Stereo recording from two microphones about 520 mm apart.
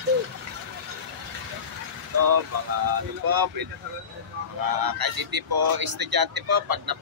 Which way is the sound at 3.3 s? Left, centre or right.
Right.